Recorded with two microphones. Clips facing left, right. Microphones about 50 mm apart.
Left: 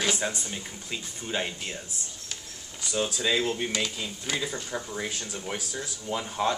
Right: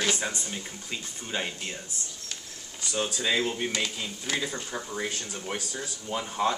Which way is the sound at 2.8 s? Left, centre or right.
Centre.